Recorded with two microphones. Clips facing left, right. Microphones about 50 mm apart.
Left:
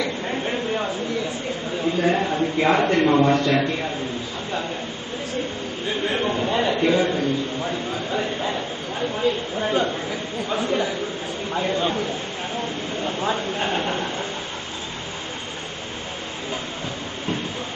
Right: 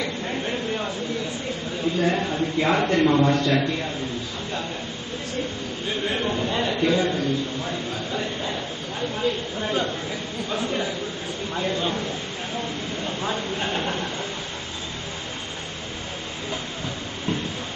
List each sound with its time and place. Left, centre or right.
0.3 s a sound: centre
2.0 s a man's voice: centre
6.0 s a man's voice: centre
9.6 s a man's voice: centre
13.0 s speech: centre